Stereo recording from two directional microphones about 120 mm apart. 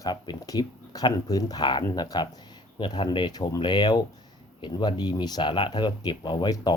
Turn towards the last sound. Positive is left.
turn(degrees=40)  # may be behind; listen again after turning